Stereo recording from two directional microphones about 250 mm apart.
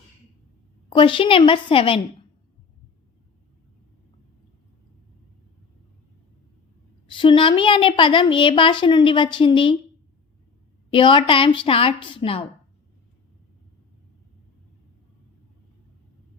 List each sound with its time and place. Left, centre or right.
0.9 s a woman's voice: centre
7.1 s a woman's voice: centre
10.9 s a woman's voice: centre